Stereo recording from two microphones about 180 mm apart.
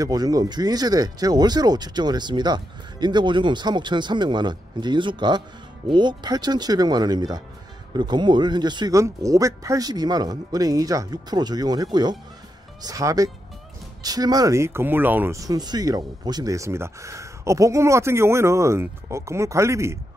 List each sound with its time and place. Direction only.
0.0 s speech: 20° right (ahead or behind)